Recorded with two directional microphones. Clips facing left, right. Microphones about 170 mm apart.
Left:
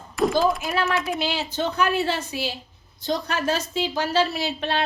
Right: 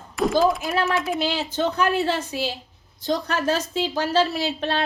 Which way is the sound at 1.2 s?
45° right (ahead or behind).